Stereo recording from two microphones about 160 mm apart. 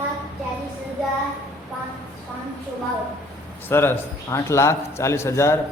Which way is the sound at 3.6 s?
15° left (ahead or behind).